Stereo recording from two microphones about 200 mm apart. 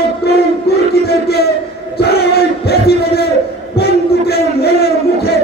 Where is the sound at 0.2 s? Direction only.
55° left (ahead or behind).